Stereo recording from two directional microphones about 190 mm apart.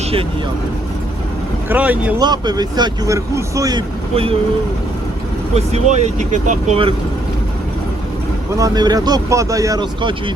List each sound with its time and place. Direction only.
1.7 s speech: 10° right (ahead or behind)
2.1 s speech: 20° right (ahead or behind)
4.1 s speech: 30° right (ahead or behind)
5.5 s speech: 35° right (ahead or behind)
8.5 s speech: 20° right (ahead or behind)